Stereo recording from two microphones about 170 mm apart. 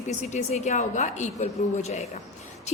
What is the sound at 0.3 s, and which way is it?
A woman's voice, 45° left (ahead or behind).